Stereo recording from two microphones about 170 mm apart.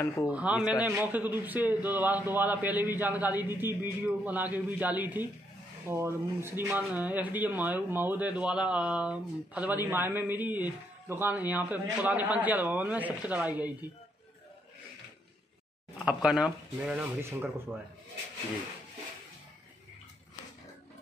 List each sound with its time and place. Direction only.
0.0 s speech: 20° left (ahead or behind)
0.3 s speech: 5° right (ahead or behind)
16.1 s speech: 5° right (ahead or behind)